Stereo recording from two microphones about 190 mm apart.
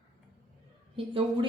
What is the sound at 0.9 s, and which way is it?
Speech, 30° right (ahead or behind).